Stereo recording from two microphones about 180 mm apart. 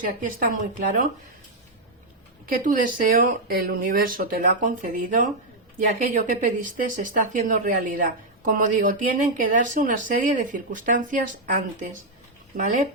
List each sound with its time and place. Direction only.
0.0 s speech: 50° right (ahead or behind)
2.6 s speech: 50° right (ahead or behind)